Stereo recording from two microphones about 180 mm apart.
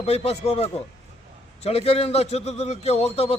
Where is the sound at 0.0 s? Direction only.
35° left (ahead or behind).